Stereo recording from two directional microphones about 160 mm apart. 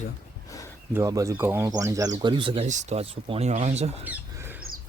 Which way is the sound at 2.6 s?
45° right (ahead or behind).